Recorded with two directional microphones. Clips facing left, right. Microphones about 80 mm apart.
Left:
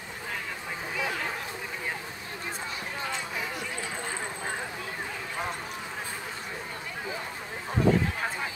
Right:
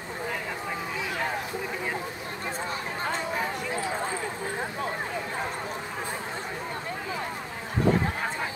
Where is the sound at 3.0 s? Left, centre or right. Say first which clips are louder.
Right 6 dB; right.